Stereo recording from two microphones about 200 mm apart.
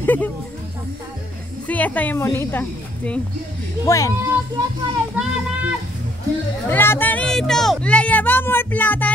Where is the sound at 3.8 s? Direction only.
15° left (ahead or behind).